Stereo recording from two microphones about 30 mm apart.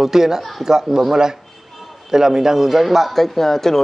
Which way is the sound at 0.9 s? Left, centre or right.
Centre.